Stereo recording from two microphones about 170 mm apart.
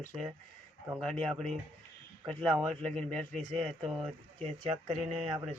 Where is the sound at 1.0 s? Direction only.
5° left (ahead or behind).